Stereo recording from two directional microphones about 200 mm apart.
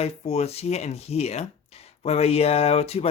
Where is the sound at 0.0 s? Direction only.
30° left (ahead or behind).